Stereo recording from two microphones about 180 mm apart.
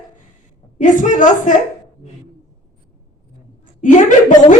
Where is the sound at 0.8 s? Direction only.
45° left (ahead or behind).